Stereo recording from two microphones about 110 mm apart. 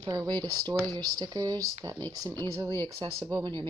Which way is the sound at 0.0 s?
35° right (ahead or behind).